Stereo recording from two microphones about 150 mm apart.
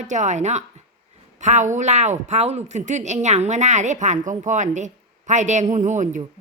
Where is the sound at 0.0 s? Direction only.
55° right (ahead or behind).